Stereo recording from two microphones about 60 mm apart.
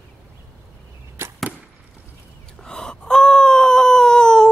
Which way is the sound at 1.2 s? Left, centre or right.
Right.